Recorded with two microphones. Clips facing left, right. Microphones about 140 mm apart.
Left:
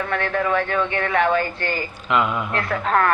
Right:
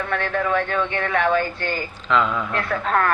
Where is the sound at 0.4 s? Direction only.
45° left (ahead or behind).